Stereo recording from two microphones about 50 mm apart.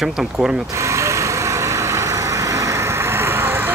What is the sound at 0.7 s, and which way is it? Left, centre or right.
Vehicle, right.